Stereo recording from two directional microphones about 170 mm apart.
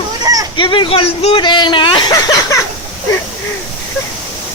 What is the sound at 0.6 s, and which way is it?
Speech, 30° left (ahead or behind).